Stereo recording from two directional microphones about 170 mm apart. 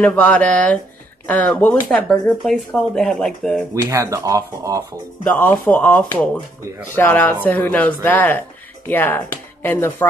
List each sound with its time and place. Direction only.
0.0 s speech: 10° left (ahead or behind)
3.7 s speech: 20° right (ahead or behind)
5.3 s speech: 10° left (ahead or behind)